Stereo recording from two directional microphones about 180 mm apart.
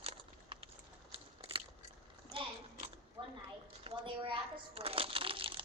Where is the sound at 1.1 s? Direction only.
30° right (ahead or behind).